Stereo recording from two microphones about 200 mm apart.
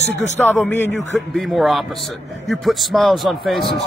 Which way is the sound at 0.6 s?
10° left (ahead or behind).